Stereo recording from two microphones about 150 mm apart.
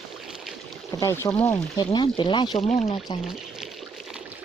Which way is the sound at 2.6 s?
50° left (ahead or behind).